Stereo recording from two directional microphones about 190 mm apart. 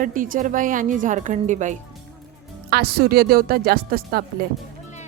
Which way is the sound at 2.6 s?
55° right (ahead or behind).